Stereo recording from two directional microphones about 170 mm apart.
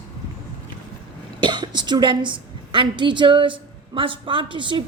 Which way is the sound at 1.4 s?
25° right (ahead or behind).